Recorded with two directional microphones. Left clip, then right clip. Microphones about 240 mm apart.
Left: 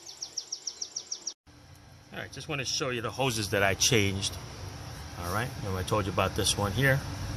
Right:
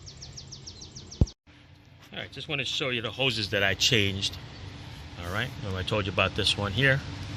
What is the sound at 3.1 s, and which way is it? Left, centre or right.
Speech, centre.